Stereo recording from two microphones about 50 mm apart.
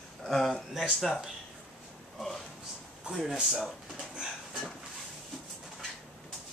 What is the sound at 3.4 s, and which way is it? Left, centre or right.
Speech, centre.